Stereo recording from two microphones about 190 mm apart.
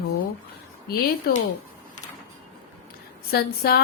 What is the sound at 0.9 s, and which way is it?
Speech, 55° left (ahead or behind).